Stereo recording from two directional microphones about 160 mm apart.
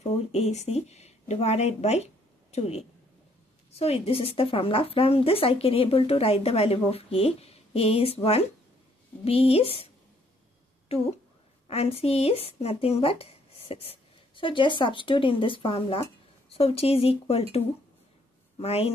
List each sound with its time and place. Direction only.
0.0 s a woman's voice: 45° left (ahead or behind)
10.9 s a woman's voice: 40° left (ahead or behind)